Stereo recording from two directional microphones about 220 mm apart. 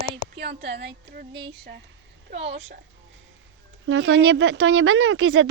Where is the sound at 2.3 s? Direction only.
55° right (ahead or behind).